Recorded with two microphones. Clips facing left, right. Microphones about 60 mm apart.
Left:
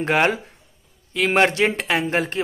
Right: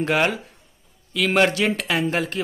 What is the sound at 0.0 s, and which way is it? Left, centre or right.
Speech, left.